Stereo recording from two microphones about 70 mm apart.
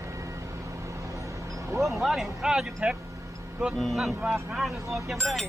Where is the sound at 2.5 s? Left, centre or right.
Centre.